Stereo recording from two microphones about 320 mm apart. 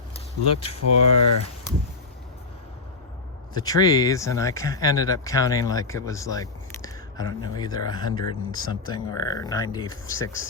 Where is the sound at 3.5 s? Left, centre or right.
Centre.